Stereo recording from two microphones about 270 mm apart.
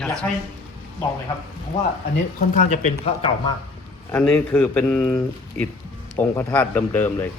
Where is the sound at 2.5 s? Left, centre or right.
Left.